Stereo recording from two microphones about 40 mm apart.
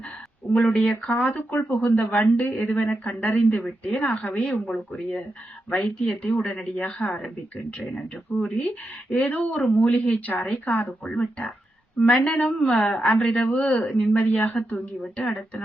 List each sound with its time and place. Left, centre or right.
0.6 s a woman's voice: left
11.1 s speech: left
12.8 s a woman's voice: centre
13.1 s speech: left